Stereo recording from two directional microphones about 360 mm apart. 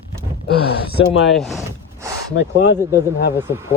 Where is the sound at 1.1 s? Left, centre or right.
Left.